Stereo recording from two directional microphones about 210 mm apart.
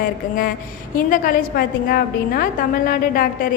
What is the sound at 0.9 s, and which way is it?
A woman's voice, 40° left (ahead or behind).